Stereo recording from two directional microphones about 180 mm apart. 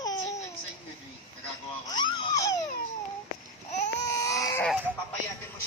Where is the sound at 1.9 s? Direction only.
25° left (ahead or behind).